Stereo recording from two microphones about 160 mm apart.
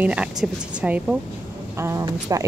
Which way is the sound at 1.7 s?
20° right (ahead or behind).